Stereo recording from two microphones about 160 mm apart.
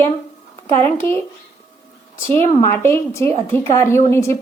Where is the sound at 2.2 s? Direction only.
35° right (ahead or behind).